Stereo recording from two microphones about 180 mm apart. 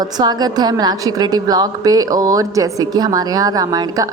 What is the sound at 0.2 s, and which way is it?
A woman's voice, 20° right (ahead or behind).